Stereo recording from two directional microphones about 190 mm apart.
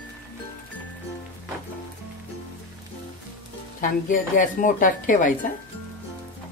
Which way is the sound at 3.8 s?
45° left (ahead or behind).